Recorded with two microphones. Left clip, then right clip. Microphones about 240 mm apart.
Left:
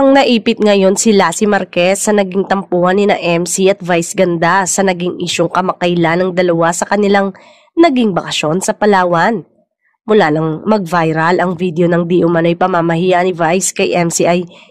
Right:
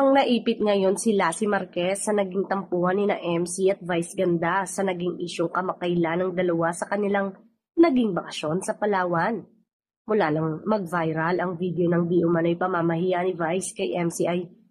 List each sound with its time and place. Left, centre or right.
0.0 s speech: left